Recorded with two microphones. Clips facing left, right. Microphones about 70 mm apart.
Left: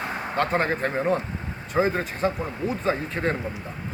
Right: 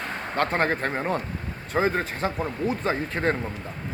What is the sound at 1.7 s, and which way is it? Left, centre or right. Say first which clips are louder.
Speech: left 1 dB; right.